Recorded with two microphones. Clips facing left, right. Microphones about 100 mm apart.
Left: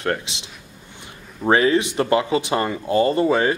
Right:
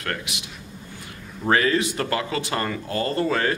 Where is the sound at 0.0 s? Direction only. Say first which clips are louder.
Left 6 dB; 25° left (ahead or behind).